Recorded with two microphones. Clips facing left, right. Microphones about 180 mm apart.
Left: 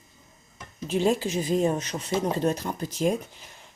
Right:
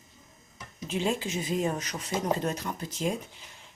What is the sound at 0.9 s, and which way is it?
Speech, 40° left (ahead or behind).